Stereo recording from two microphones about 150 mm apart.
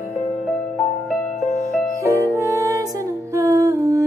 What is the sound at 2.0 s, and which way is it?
Music, 20° right (ahead or behind).